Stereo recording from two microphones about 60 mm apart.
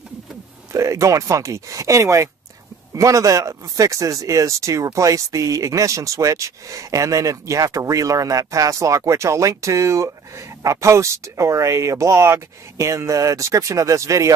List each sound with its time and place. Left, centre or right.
0.7 s speech: right